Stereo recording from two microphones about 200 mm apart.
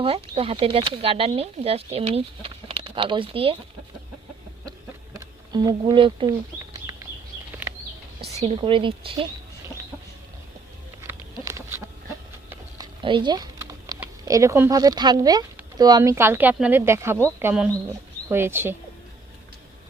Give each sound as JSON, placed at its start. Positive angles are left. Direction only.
{"t": 0.0, "sound": "speech", "side_deg": -25}
{"t": 5.1, "sound": "speech", "side_deg": -20}
{"t": 8.4, "sound": "speech", "side_deg": -30}
{"t": 11.0, "sound": "a sound", "side_deg": -15}
{"t": 14.0, "sound": "speech", "side_deg": -15}